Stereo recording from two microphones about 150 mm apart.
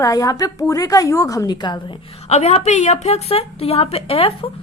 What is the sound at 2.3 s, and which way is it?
Speech, 45° left (ahead or behind).